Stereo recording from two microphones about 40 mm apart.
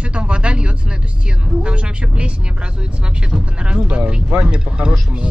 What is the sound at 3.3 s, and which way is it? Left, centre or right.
Speech, right.